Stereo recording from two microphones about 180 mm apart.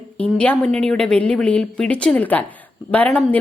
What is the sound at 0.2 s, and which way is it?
A woman's voice, 5° left (ahead or behind).